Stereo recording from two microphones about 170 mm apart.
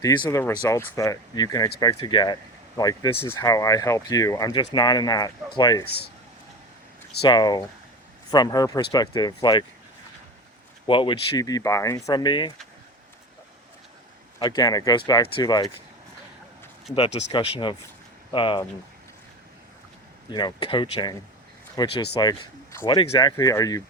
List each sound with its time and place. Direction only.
0.3 s speech: 15° left (ahead or behind)
7.2 s speech: 25° left (ahead or behind)
10.8 s speech: 30° left (ahead or behind)
14.3 s speech: 25° left (ahead or behind)
16.9 s speech: 35° left (ahead or behind)
20.3 s speech: 25° left (ahead or behind)